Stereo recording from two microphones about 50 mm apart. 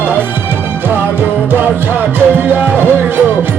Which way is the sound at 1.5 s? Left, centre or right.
Right.